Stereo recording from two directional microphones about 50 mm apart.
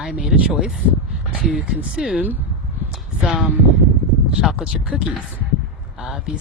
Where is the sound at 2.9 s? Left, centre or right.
Centre.